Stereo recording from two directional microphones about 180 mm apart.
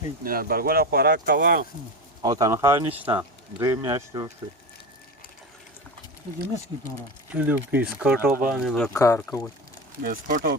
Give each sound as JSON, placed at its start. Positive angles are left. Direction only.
{"t": 0.2, "sound": "speech", "side_deg": -55}
{"t": 2.2, "sound": "speech", "side_deg": -20}
{"t": 7.3, "sound": "speech", "side_deg": -10}
{"t": 8.9, "sound": "speech", "side_deg": 15}
{"t": 10.0, "sound": "speech", "side_deg": -50}